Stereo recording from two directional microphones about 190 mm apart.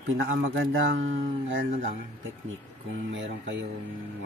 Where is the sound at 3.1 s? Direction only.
75° right (ahead or behind).